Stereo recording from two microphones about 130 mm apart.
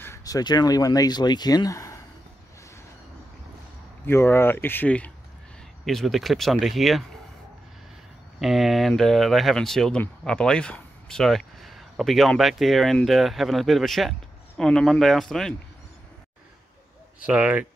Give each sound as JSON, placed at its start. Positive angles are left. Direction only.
{"t": 0.0, "sound": "speech", "side_deg": 25}
{"t": 4.0, "sound": "speech", "side_deg": 15}
{"t": 8.4, "sound": "speech", "side_deg": 0}
{"t": 17.3, "sound": "speech", "side_deg": -10}